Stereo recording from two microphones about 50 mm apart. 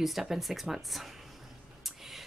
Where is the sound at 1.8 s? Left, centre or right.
Centre.